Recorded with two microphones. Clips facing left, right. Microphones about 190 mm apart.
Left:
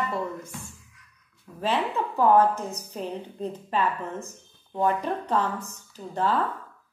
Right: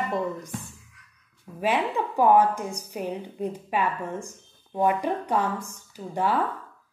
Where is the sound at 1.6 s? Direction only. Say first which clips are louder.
Right 1 dB; 10° right (ahead or behind).